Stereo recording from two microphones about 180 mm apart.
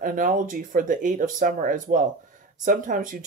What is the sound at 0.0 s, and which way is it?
Speech, 50° right (ahead or behind).